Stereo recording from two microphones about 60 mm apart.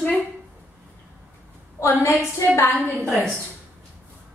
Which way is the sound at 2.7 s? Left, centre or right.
Centre.